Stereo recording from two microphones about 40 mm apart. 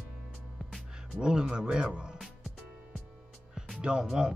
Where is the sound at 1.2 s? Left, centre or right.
Centre.